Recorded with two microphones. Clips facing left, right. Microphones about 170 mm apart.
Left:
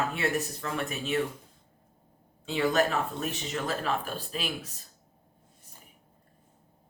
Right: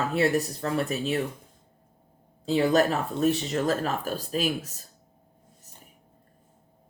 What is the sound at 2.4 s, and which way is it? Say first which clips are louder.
Speech: right 4 dB; 35° right (ahead or behind).